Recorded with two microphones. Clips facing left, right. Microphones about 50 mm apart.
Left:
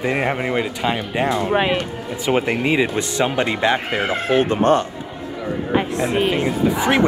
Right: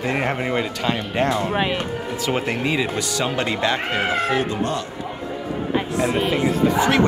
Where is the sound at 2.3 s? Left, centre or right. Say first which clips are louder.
Left 5 dB; left.